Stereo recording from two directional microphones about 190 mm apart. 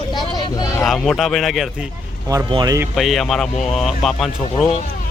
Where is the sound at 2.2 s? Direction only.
20° right (ahead or behind).